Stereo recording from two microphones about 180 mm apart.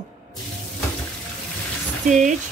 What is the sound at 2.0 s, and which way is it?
Speech, 45° right (ahead or behind).